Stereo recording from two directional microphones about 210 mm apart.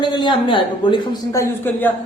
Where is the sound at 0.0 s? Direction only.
20° left (ahead or behind).